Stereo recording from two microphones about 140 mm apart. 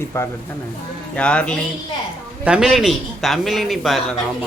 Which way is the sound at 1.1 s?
10° left (ahead or behind).